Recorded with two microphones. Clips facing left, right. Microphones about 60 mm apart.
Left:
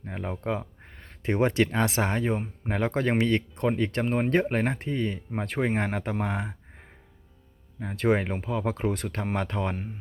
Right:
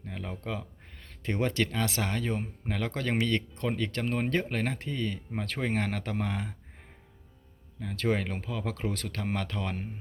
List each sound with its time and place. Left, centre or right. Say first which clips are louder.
0.0 s a sound: left 6 dB; left
1.2 s speech: left 5 dB; left
7.9 s speech: left 5 dB; left